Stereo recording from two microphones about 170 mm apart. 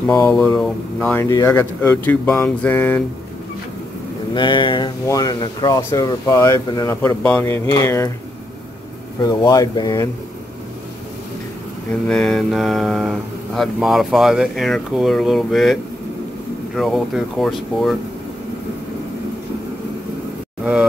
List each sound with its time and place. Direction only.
0.4 s speech: 5° left (ahead or behind)
1.2 s speech: 20° left (ahead or behind)
4.3 s speech: 25° left (ahead or behind)
9.2 s speech: 25° left (ahead or behind)
12.1 s speech: 5° left (ahead or behind)